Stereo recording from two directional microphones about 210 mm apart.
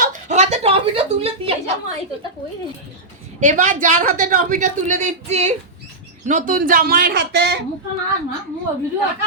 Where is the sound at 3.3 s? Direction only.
35° right (ahead or behind); by 7.6 s 55° right (ahead or behind).